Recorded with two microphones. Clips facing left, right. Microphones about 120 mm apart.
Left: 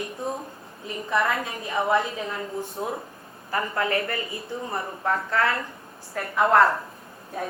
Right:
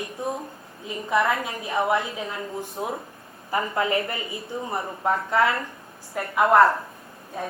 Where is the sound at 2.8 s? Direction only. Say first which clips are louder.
Even; 15° right (ahead or behind).